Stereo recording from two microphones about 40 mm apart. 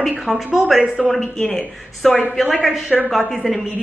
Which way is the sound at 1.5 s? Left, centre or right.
Centre.